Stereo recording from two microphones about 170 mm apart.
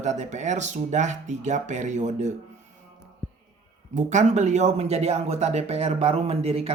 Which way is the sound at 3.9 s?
45° right (ahead or behind).